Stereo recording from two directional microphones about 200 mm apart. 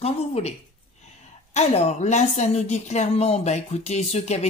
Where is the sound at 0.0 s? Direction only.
30° left (ahead or behind).